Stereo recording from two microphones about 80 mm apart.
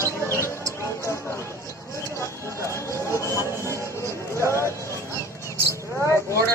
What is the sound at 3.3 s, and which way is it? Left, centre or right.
Music, right.